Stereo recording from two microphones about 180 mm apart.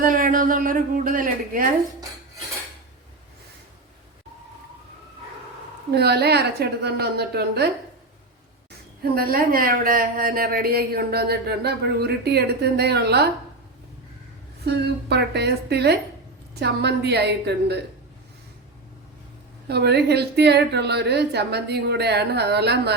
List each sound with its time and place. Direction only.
0.0 s a woman's voice: 50° right (ahead or behind)
5.9 s speech: 65° right (ahead or behind)
9.1 s speech: 55° right (ahead or behind)
14.6 s a woman's voice: 65° right (ahead or behind)
19.6 s speech: 65° right (ahead or behind)